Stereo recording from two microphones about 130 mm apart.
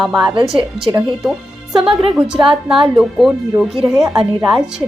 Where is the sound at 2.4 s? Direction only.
40° right (ahead or behind).